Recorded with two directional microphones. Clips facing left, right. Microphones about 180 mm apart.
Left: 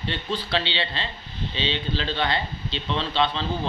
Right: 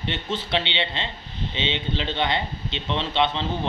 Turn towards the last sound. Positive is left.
turn(degrees=-20)  # may be behind; listen again after turning